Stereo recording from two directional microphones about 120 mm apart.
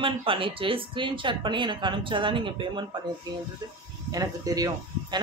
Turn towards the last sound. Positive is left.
turn(degrees=-30)  # may be behind; listen again after turning